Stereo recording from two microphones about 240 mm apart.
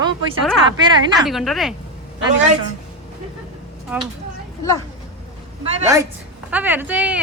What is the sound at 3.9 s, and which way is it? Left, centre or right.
Speech, centre.